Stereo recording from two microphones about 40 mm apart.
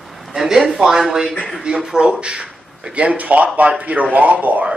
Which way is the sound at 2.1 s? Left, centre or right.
Right.